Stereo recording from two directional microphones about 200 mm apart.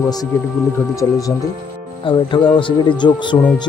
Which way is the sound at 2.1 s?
25° left (ahead or behind).